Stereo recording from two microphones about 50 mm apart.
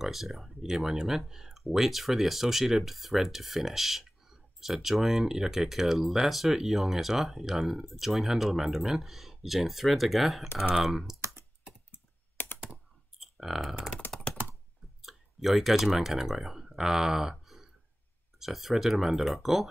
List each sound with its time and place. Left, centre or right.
0.0 s speech: centre
11.1 s computer keyboard: right
12.4 s computer keyboard: left
13.2 s clicking: centre
14.3 s computer keyboard: left
15.0 s speech: centre